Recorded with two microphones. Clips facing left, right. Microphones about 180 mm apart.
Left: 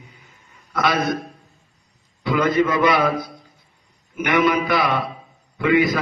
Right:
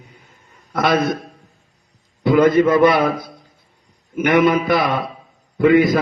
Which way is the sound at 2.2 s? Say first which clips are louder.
Right 6 dB; 50° right (ahead or behind).